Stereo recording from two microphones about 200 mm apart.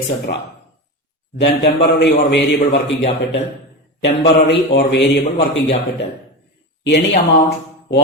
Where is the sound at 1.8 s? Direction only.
55° left (ahead or behind).